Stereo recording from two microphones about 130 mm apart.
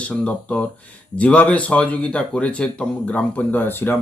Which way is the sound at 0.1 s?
10° left (ahead or behind).